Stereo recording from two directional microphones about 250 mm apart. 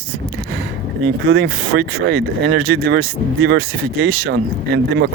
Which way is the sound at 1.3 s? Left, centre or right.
Right.